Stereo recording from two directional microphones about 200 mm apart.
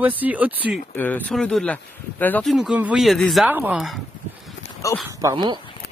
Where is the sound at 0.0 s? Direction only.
10° right (ahead or behind).